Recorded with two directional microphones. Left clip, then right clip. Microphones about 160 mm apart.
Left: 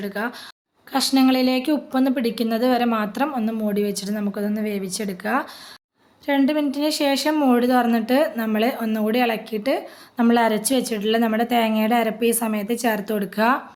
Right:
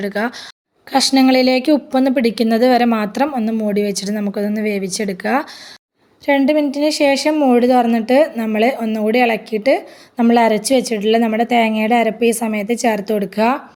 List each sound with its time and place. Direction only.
0.0 s a woman's voice: 40° right (ahead or behind); by 13.6 s 20° right (ahead or behind)